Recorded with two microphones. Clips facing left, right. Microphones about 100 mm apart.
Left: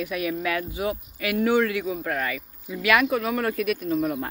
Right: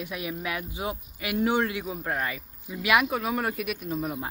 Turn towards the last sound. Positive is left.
turn(degrees=-10)  # may be behind; listen again after turning